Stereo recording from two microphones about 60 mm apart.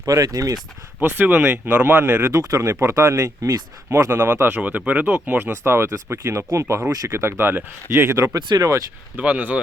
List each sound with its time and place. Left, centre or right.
0.0 s speech: right
1.0 s speech: right
2.3 s speech: right
4.1 s speech: right
5.4 s speech: right
7.1 s speech: right
8.2 s speech: right
9.1 s speech: right